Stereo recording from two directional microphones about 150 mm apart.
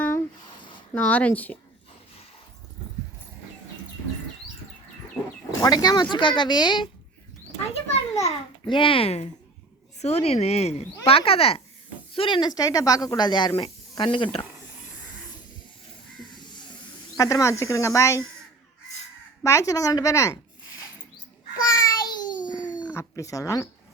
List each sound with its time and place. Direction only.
0.9 s speech: 10° left (ahead or behind)
5.5 s speech: 25° left (ahead or behind)
7.7 s a child's voice: 45° left (ahead or behind)
16.3 s crow: 30° left (ahead or behind)
17.2 s speech: 25° left (ahead or behind)
19.4 s speech: 20° left (ahead or behind)
21.7 s a sound: 20° left (ahead or behind)
22.9 s speech: 20° left (ahead or behind)